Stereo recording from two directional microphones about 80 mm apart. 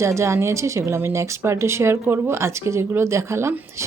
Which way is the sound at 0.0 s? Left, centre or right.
Right.